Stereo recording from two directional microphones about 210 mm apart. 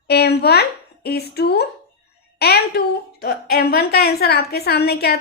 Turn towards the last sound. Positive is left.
turn(degrees=50)  # may be behind; listen again after turning